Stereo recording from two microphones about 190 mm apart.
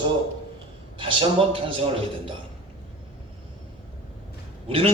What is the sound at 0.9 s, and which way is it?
Speech, 25° right (ahead or behind).